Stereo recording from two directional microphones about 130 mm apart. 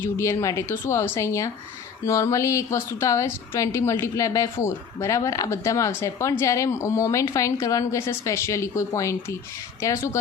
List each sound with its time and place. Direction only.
0.0 s a woman's voice: 20° left (ahead or behind)